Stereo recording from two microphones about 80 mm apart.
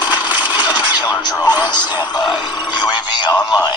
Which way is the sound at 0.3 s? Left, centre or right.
Right.